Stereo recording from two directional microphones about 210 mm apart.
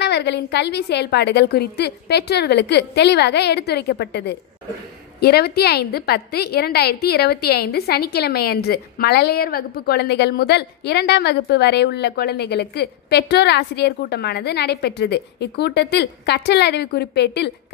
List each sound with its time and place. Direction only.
0.0 s a woman's voice: 55° left (ahead or behind)